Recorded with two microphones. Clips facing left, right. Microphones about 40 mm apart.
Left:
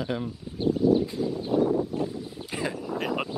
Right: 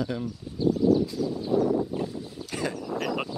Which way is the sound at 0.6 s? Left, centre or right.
Left.